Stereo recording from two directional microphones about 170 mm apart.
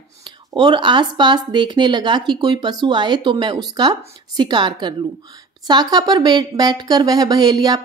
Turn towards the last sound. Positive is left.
turn(degrees=-25)  # may be behind; listen again after turning